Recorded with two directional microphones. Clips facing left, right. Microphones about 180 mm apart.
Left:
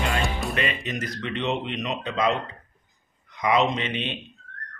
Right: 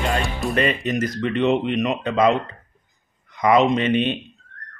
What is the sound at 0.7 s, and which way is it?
Speech, 45° right (ahead or behind).